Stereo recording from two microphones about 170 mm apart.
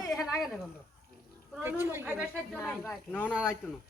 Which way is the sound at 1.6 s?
15° right (ahead or behind).